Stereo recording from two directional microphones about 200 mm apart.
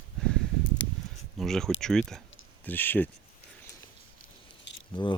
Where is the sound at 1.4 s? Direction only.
Centre (ahead or behind).